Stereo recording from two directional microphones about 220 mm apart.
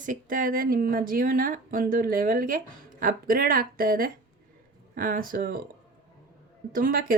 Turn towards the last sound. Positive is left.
turn(degrees=-40)  # may be behind; listen again after turning